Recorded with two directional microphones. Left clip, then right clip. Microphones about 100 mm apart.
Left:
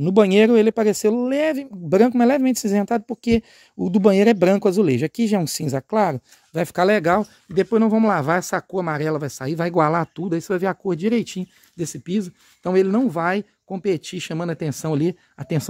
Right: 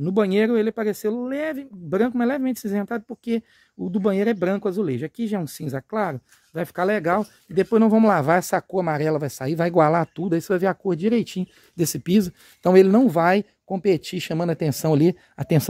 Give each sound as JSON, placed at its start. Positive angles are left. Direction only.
{"t": 0.0, "sound": "speech", "side_deg": 55}
{"t": 6.1, "sound": "speech", "side_deg": 60}
{"t": 7.0, "sound": "speech", "side_deg": 35}
{"t": 7.7, "sound": "speech", "side_deg": -15}
{"t": 11.7, "sound": "speech", "side_deg": -80}
{"t": 12.9, "sound": "speech", "side_deg": -40}
{"t": 13.8, "sound": "speech", "side_deg": -25}